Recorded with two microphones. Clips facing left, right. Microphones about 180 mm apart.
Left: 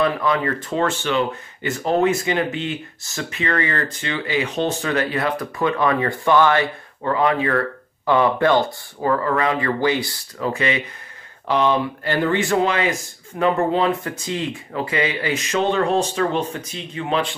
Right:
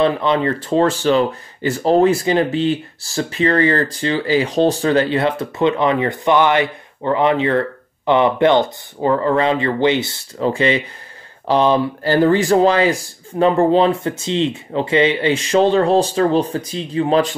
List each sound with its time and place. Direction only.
0.0 s speech: 25° right (ahead or behind)